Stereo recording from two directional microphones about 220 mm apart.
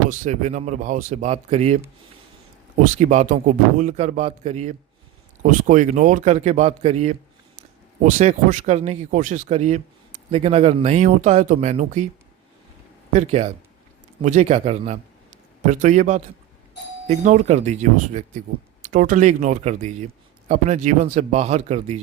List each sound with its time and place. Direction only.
0.1 s speech: 35° right (ahead or behind)
13.1 s speech: 30° right (ahead or behind)